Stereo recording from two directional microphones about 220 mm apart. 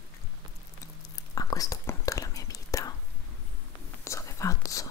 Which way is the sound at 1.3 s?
15° left (ahead or behind).